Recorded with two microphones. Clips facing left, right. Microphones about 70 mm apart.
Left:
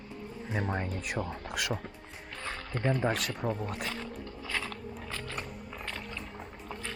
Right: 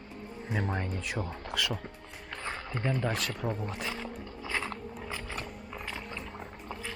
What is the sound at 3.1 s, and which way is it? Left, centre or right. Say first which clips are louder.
Speech: left 1 dB; centre.